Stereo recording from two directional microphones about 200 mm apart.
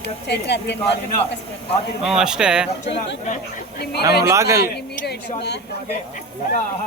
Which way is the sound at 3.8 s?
55° left (ahead or behind).